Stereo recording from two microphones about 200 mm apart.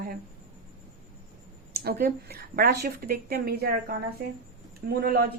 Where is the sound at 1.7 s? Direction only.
50° right (ahead or behind).